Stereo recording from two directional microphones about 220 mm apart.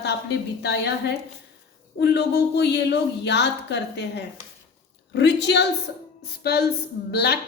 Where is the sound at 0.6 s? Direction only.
50° left (ahead or behind).